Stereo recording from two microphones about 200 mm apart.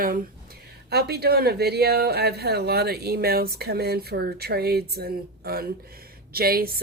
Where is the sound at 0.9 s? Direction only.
55° right (ahead or behind).